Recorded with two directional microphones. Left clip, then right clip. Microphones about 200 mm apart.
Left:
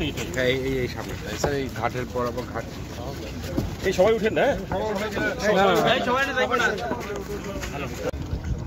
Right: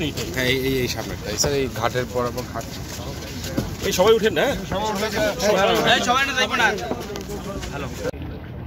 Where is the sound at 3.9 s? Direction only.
30° right (ahead or behind).